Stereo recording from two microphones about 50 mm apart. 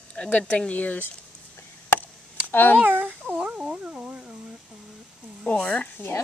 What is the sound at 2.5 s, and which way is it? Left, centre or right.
Speech, left.